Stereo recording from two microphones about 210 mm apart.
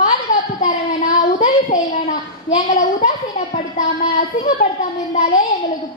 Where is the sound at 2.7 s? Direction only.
35° left (ahead or behind).